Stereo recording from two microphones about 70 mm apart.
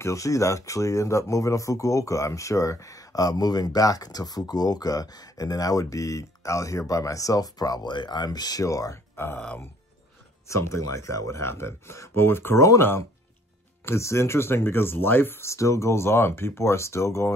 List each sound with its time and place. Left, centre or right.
0.0 s speech: left
8.6 s speech: left
9.1 s speech: left
10.5 s speech: left
13.8 s speech: left
15.5 s speech: left